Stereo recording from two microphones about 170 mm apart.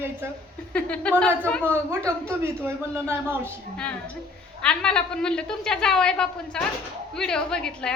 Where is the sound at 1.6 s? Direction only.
15° right (ahead or behind).